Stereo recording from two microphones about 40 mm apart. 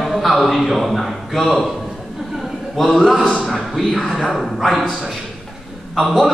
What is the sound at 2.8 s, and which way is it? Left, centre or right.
Speech, centre.